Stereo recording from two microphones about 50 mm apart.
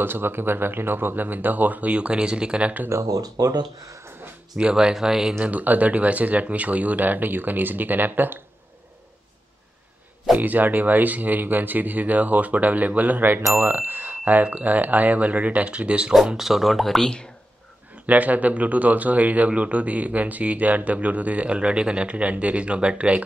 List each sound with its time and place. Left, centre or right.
0.0 s speech: right; by 2.7 s centre
2.9 s speech: right
3.8 s a sound: right
4.6 s speech: centre
5.4 s speech: right
10.3 s speech: right
13.4 s speech: right
13.7 s speech: right
16.3 s speech: centre
18.0 s speech: right